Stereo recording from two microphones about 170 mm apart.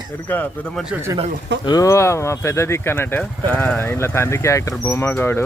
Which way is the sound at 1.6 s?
20° left (ahead or behind).